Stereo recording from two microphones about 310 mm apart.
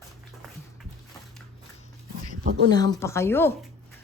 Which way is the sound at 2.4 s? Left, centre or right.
Right.